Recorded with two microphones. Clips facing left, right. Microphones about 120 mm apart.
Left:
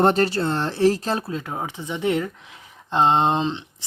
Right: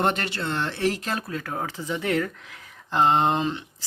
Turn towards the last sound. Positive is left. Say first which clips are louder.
# left 2 dB
turn(degrees=25)  # may be behind; listen again after turning